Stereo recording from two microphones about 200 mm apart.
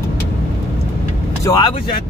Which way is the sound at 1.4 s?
15° left (ahead or behind).